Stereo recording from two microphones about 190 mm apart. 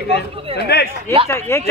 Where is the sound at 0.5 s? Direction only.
60° left (ahead or behind).